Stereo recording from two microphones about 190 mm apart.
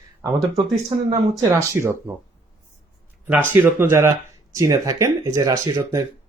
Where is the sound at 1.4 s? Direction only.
15° right (ahead or behind).